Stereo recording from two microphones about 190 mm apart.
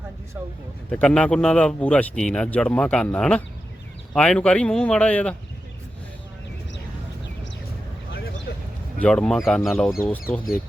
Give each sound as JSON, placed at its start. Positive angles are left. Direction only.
{"t": 0.9, "sound": "a man's voice", "side_deg": 5}
{"t": 8.1, "sound": "a sound", "side_deg": 55}
{"t": 9.0, "sound": "a man's voice", "side_deg": 5}